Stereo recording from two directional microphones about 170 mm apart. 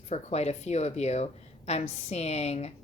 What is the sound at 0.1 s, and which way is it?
A woman's voice, 40° left (ahead or behind).